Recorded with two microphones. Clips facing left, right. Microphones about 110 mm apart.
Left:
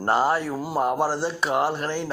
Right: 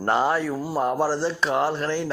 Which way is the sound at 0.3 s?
45° left (ahead or behind).